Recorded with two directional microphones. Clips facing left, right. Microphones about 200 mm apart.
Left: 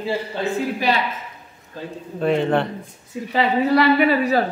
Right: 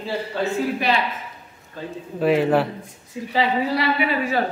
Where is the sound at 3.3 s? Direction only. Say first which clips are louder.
Left 3 dB; 55° left (ahead or behind).